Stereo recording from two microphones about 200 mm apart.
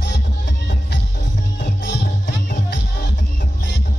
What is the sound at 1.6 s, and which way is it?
Music, 55° left (ahead or behind).